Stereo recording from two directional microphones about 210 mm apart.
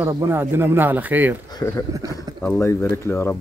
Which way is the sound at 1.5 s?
15° left (ahead or behind).